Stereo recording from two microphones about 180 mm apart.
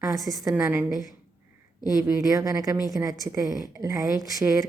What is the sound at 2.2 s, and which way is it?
A woman's voice, 20° right (ahead or behind).